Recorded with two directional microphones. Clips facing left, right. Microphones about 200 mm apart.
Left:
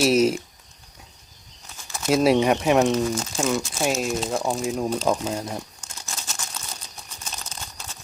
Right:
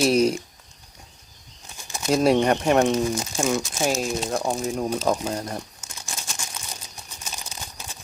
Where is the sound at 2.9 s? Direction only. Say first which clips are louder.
Even; 10° right (ahead or behind).